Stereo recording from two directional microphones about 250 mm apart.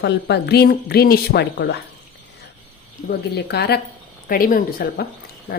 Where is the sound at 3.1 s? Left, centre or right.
Left.